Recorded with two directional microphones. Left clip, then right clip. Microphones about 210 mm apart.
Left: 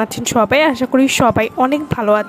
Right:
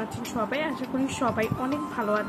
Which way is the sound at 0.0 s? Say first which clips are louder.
Left 15 dB; 55° left (ahead or behind).